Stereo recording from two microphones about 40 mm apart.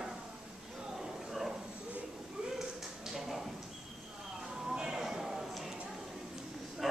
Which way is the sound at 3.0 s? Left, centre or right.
Centre.